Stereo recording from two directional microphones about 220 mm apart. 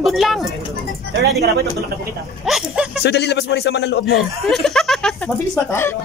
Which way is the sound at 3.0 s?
50° left (ahead or behind).